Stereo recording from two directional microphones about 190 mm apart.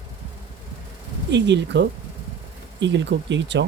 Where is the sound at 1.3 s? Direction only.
65° right (ahead or behind).